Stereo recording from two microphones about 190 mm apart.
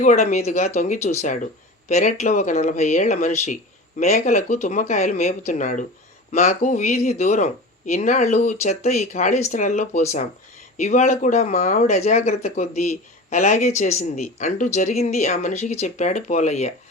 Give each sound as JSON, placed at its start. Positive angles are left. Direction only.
{"t": 0.0, "sound": "speech", "side_deg": 40}